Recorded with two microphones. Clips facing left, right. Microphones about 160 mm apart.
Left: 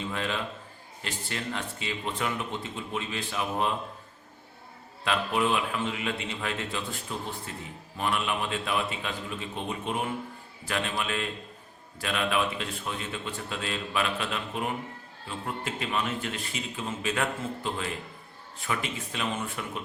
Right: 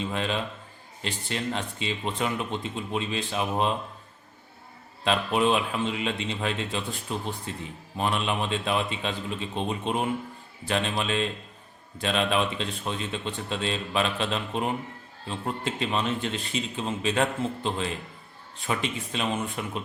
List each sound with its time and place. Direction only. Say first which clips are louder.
0.0 s a man's voice: right 3 dB; 20° right (ahead or behind)
5.0 s speech: right 3 dB; 20° right (ahead or behind)